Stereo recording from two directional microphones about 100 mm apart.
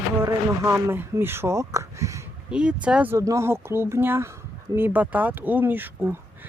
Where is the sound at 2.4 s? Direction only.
10° right (ahead or behind).